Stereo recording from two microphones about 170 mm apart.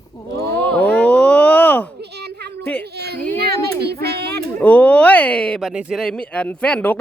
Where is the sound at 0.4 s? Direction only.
10° left (ahead or behind).